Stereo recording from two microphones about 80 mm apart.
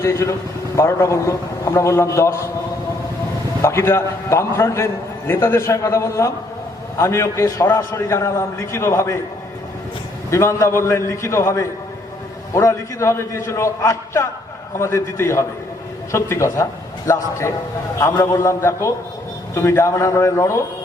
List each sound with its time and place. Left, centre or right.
0.0 s a man's voice: left
3.6 s a man's voice: left
10.2 s a man's voice: left